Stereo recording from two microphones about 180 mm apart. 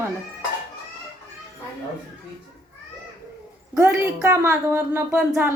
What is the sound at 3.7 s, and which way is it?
A woman's voice, 15° right (ahead or behind).